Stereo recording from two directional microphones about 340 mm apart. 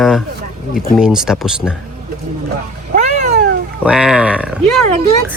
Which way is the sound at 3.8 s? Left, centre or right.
Centre.